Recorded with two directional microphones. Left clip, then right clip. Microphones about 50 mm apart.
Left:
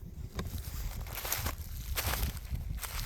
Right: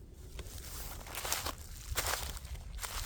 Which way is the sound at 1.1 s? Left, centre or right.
Centre.